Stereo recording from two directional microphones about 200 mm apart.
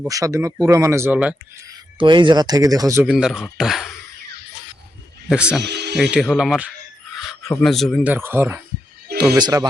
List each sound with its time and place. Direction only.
0.1 s speech: 15° right (ahead or behind)
1.7 s speech: 25° right (ahead or behind)
3.1 s speech: 5° right (ahead or behind)
5.3 s speech: 5° right (ahead or behind)
5.6 s music: 55° right (ahead or behind)
6.0 s speech: centre (ahead or behind)
7.2 s a sound: centre (ahead or behind)
7.5 s speech: centre (ahead or behind)
8.1 s speech: 10° right (ahead or behind)